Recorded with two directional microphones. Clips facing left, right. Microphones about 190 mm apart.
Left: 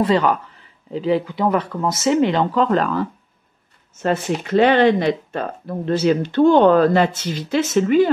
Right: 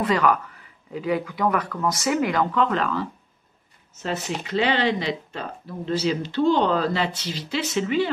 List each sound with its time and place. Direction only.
0.0 s speech: 30° left (ahead or behind); by 8.1 s 45° left (ahead or behind)